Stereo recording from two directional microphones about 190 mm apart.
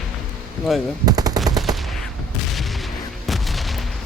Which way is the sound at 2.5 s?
Centre (ahead or behind).